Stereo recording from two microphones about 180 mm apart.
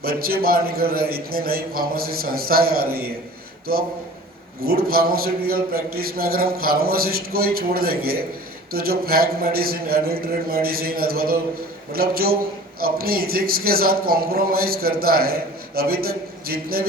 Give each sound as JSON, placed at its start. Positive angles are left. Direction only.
{"t": 0.0, "sound": "a man's voice", "side_deg": -55}